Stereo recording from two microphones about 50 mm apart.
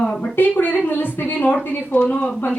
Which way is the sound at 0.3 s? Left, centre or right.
Left.